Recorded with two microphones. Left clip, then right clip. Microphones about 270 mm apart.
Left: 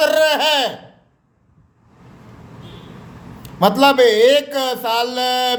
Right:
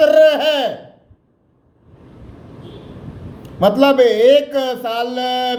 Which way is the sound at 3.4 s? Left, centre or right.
Centre.